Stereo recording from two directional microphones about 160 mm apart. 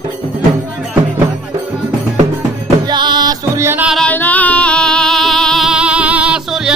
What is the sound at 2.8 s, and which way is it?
Music, 30° right (ahead or behind).